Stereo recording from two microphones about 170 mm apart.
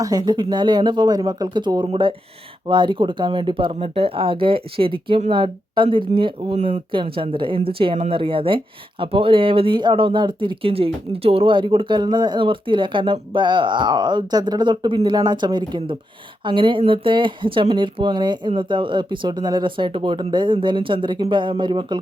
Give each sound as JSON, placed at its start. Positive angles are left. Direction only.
{"t": 0.0, "sound": "speech", "side_deg": -25}